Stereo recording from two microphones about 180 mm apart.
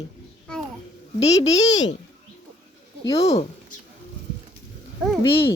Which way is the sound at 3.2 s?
35° left (ahead or behind).